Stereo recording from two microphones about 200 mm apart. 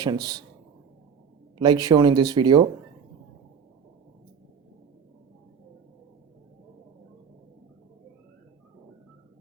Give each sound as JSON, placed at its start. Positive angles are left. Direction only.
{"t": 0.0, "sound": "speech", "side_deg": -20}
{"t": 1.5, "sound": "speech", "side_deg": -20}